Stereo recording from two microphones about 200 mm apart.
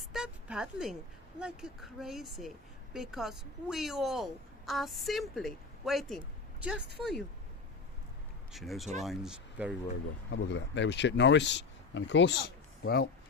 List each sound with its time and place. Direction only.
0.0 s a sound: centre (ahead or behind)
1.4 s speech: 5° right (ahead or behind)
8.5 s speech: centre (ahead or behind)
10.3 s speech: 60° left (ahead or behind)